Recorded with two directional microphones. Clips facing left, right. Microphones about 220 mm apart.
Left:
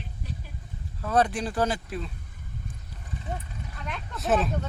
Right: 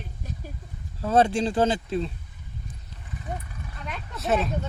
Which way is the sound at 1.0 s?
25° right (ahead or behind).